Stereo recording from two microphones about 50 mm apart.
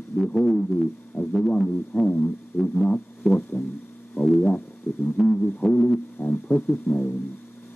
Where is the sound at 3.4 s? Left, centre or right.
Left.